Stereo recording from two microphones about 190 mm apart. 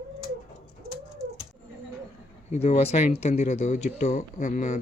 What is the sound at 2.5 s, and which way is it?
Speech, 30° left (ahead or behind).